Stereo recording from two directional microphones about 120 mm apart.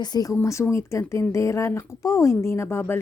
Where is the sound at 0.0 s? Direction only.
35° left (ahead or behind).